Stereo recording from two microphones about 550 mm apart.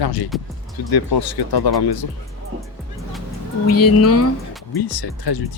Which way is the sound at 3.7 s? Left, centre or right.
Left.